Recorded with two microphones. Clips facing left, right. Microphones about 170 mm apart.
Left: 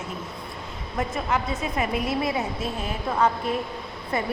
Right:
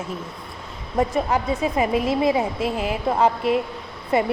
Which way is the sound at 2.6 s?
90° right.